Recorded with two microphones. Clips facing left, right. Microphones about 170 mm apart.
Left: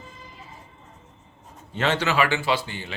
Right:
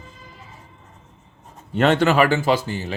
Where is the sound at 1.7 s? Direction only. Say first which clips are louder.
Right 7 dB; 55° right (ahead or behind).